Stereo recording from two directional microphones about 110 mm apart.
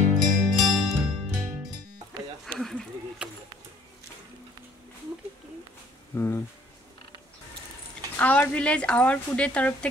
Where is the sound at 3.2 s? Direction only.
10° right (ahead or behind).